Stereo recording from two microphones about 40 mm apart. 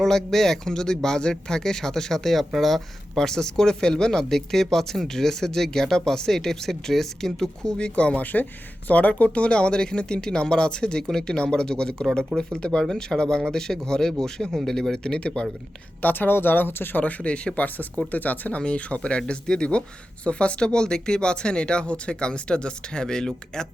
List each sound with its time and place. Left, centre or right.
0.0 s speech: centre
3.2 s speech: centre
7.8 s speech: left
8.2 s speech: left; by 14.5 s centre
14.5 s speech: centre; by 15.4 s left
16.0 s speech: left
17.0 s speech: left
18.1 s speech: left
18.6 s speech: left